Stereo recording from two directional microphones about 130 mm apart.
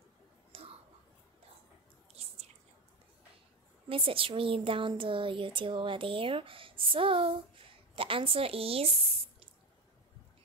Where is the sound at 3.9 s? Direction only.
45° right (ahead or behind).